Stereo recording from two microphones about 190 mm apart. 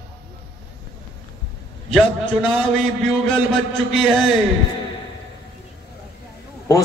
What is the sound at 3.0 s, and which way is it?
A man's voice, centre (ahead or behind).